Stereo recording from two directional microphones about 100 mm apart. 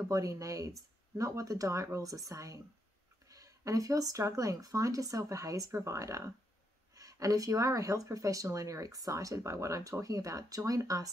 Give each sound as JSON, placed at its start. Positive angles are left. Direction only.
{"t": 0.1, "sound": "speech", "side_deg": -35}